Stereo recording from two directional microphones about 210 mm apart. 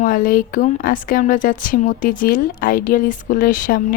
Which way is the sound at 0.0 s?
40° left (ahead or behind).